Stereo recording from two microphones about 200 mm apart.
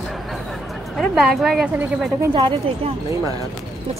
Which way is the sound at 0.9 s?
Centre (ahead or behind).